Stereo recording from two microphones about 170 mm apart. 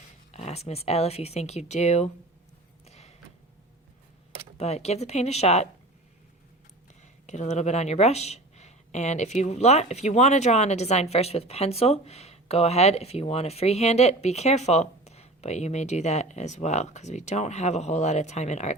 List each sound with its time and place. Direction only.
0.3 s speech: 40° left (ahead or behind)
2.8 s a sound: 40° left (ahead or behind)
4.5 s speech: 40° left (ahead or behind)
7.3 s speech: 40° left (ahead or behind)